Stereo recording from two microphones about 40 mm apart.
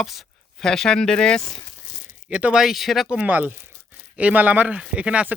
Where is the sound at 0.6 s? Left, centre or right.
Centre.